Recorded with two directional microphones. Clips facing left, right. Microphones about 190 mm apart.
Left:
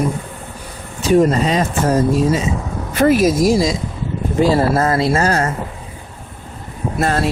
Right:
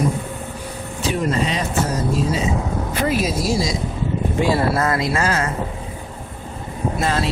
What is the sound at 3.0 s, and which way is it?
Speech, 50° left (ahead or behind).